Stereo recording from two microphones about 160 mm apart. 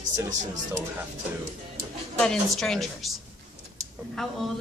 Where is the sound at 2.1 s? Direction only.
5° left (ahead or behind).